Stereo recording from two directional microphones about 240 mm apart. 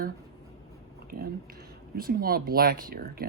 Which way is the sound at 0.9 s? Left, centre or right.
Right.